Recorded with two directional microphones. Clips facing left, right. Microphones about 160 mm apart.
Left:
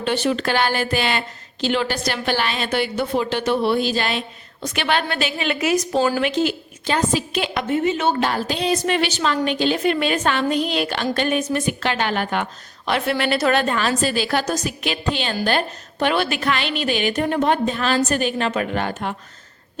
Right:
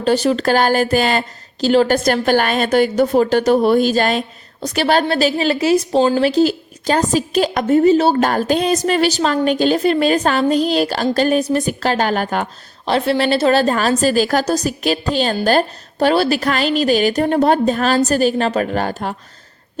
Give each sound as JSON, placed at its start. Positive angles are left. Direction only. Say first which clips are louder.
{"t": 0.0, "sound": "a woman's voice", "louder": "right 6 dB", "side_deg": -40}